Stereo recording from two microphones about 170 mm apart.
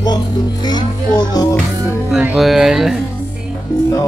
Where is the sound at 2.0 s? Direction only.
5° right (ahead or behind).